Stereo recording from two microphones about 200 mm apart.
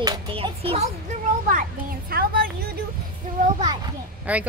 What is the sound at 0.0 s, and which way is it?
Children playing, 25° right (ahead or behind).